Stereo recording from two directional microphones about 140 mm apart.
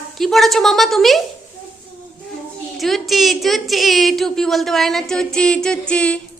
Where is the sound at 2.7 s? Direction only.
Centre (ahead or behind).